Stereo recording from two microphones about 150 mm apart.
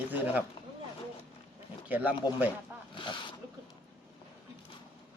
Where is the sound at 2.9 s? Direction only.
30° left (ahead or behind).